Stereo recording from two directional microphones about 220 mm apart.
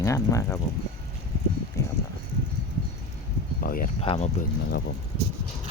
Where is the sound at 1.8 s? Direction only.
15° left (ahead or behind).